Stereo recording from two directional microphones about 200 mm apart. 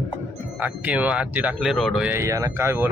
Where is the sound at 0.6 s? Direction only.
5° right (ahead or behind).